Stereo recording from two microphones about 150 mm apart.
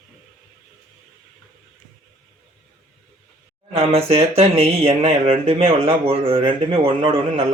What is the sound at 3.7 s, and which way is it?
Speech, 40° right (ahead or behind).